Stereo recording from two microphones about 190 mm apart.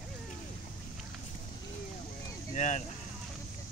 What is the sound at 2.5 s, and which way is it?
Vehicle, 40° left (ahead or behind).